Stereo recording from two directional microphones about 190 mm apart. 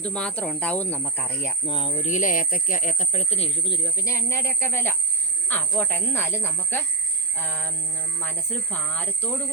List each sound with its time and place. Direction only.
0.0 s speech: 5° left (ahead or behind)
1.6 s speech: 25° left (ahead or behind); by 9.3 s 10° left (ahead or behind)